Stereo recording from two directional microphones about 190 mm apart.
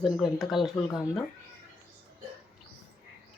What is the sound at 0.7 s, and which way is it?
Speech, 20° left (ahead or behind).